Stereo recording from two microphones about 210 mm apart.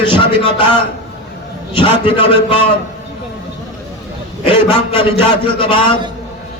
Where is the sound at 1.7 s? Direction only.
25° left (ahead or behind).